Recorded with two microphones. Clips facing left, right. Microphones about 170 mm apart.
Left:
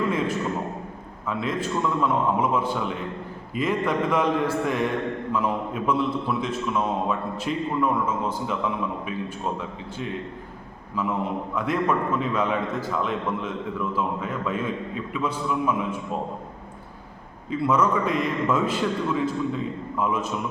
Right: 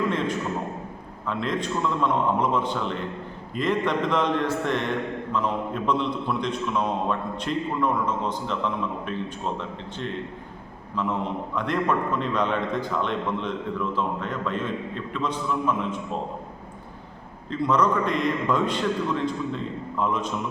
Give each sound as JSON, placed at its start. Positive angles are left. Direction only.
{"t": 0.1, "sound": "a sound", "side_deg": 10}
{"t": 1.3, "sound": "a man's voice", "side_deg": 5}
{"t": 17.5, "sound": "a man's voice", "side_deg": 5}